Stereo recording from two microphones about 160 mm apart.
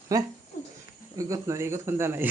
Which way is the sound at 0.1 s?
20° right (ahead or behind).